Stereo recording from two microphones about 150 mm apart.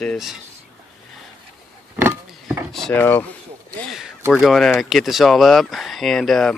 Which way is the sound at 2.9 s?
15° left (ahead or behind).